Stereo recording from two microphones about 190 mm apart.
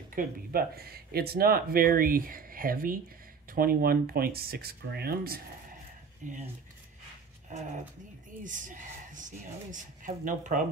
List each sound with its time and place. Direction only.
0.1 s speech: 50° right (ahead or behind)
6.2 s speech: 45° right (ahead or behind)
8.5 s speech: 45° right (ahead or behind)